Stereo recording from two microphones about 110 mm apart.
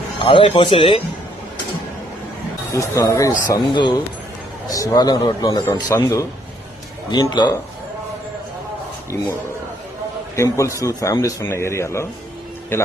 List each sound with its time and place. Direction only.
0.2 s speech: 50° left (ahead or behind)
2.9 s a man's voice: 30° left (ahead or behind)
7.1 s a man's voice: 40° left (ahead or behind)
10.3 s a man's voice: 25° left (ahead or behind)